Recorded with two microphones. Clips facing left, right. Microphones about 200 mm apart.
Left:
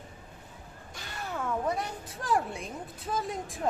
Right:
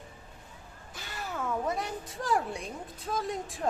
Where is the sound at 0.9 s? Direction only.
Centre (ahead or behind).